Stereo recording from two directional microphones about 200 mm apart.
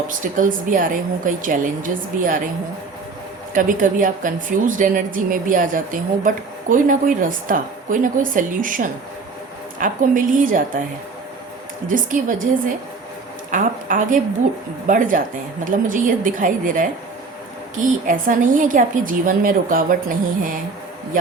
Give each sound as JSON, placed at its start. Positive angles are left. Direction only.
{"t": 0.1, "sound": "a woman's voice", "side_deg": -40}
{"t": 3.5, "sound": "a woman's voice", "side_deg": -40}
{"t": 11.9, "sound": "a woman's voice", "side_deg": -40}